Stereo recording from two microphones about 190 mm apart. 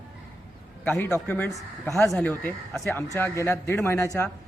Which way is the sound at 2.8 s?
15° left (ahead or behind).